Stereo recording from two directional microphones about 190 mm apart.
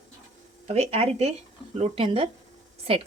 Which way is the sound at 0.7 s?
35° right (ahead or behind).